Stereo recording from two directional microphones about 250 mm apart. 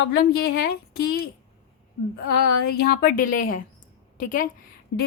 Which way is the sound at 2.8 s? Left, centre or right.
Left.